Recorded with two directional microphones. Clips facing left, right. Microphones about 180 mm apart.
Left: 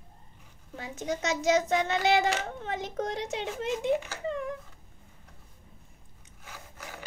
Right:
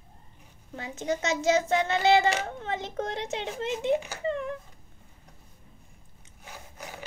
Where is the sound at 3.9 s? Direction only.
15° right (ahead or behind).